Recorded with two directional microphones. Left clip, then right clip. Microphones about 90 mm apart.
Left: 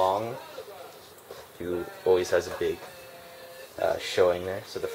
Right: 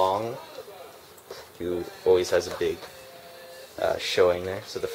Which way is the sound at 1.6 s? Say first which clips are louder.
Right 2 dB; 40° right (ahead or behind).